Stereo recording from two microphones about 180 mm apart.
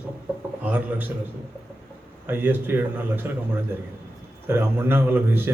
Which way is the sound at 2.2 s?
10° right (ahead or behind).